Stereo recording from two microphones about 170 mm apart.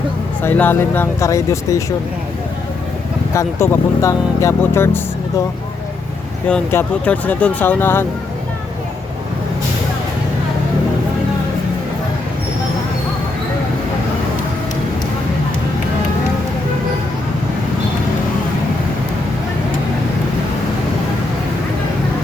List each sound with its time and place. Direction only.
0.4 s speech: 10° left (ahead or behind)
3.3 s speech: 15° left (ahead or behind)
6.5 s speech: 10° left (ahead or behind)